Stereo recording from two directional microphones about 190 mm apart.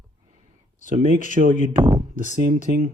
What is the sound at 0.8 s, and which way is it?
Speech, 45° right (ahead or behind).